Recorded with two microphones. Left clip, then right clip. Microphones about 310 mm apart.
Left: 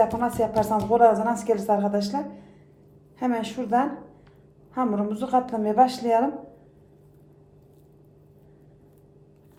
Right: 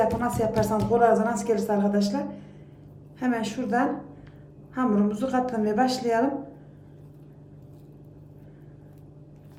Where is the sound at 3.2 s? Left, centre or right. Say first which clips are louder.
Left 1 dB; centre.